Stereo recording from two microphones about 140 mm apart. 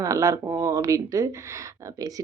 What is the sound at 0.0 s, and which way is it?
A woman's voice, 25° right (ahead or behind).